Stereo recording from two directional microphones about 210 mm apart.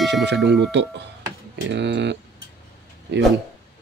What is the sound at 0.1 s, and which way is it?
Speech, 55° right (ahead or behind).